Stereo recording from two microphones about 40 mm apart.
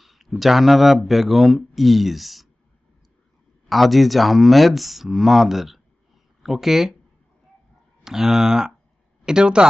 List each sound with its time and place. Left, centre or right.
0.0 s speech: centre
3.7 s speech: centre
8.0 s speech: centre